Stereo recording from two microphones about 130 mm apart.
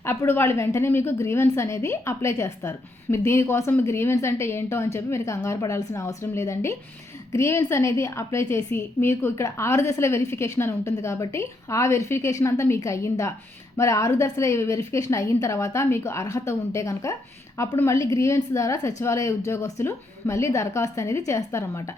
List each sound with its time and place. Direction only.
0.0 s a woman's voice: 20° left (ahead or behind)